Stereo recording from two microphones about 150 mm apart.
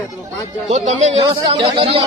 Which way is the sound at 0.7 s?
50° right (ahead or behind).